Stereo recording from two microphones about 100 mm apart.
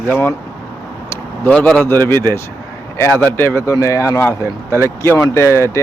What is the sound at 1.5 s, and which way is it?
Speech, 10° left (ahead or behind).